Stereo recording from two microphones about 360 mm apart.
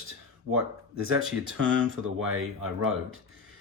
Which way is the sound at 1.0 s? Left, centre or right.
Right.